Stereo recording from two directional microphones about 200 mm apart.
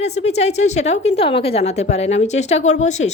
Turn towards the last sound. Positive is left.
turn(degrees=35)  # may be behind; listen again after turning